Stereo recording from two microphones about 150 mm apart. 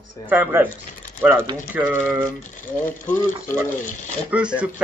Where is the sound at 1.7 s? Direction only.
15° right (ahead or behind).